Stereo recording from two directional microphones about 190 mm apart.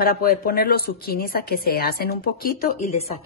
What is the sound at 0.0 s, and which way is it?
A woman's voice, 50° left (ahead or behind).